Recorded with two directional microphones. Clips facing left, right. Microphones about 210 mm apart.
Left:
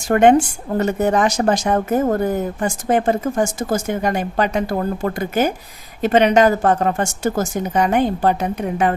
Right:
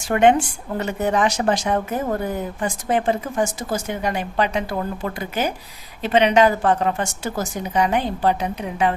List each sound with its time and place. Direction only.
0.1 s a woman's voice: 45° left (ahead or behind)